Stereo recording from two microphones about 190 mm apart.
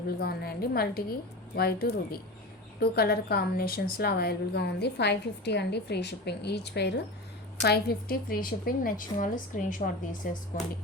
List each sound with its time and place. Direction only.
0.2 s a woman's voice: 55° left (ahead or behind)